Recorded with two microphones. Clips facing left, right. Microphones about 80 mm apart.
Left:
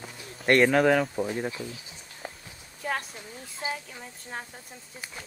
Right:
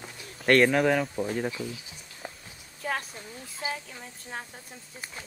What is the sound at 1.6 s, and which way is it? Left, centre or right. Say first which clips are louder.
Speech: right 2 dB; left.